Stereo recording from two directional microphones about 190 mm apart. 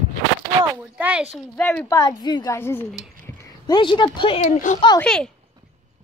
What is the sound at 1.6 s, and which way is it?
Speech, 5° left (ahead or behind).